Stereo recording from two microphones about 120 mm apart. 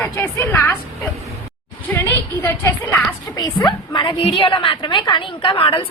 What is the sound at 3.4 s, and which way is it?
A woman's voice, 35° left (ahead or behind).